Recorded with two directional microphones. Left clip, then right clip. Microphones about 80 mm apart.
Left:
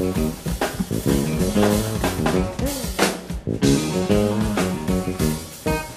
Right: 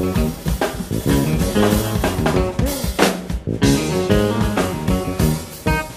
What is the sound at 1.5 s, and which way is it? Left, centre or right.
Music, left.